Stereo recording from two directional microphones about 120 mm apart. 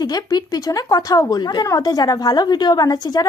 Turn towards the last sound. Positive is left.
turn(degrees=35)  # may be behind; listen again after turning